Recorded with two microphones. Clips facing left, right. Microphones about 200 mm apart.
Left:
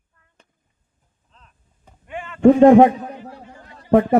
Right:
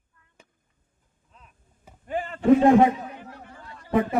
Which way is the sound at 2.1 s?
35° right (ahead or behind).